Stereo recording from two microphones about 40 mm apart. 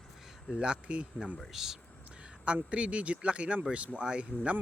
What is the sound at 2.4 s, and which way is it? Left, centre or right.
Speech, right.